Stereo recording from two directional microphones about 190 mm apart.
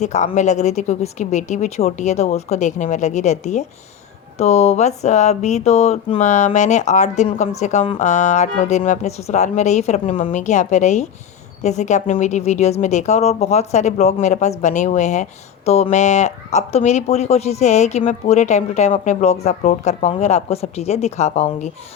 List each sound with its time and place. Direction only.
0.0 s speech: 40° left (ahead or behind)